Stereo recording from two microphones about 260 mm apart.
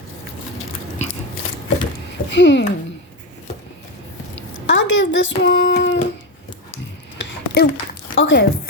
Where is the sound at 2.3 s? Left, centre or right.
Left.